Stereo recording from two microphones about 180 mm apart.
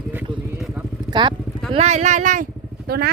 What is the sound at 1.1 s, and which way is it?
Speech, 25° right (ahead or behind).